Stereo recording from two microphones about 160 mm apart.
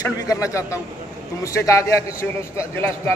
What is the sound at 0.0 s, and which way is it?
A man's voice, 20° left (ahead or behind).